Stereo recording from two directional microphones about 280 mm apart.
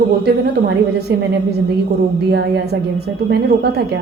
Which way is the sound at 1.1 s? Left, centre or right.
Right.